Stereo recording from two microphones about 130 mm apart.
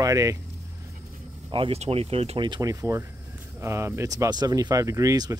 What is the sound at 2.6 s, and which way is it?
Speech, 25° right (ahead or behind).